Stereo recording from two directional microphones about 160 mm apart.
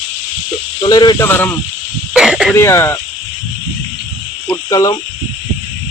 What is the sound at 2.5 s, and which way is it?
Speech, 15° left (ahead or behind).